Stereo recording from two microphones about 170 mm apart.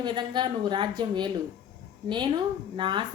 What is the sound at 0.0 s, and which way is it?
A woman's voice, 25° right (ahead or behind).